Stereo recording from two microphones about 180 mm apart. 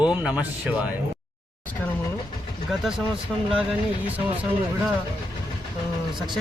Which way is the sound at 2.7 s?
5° right (ahead or behind).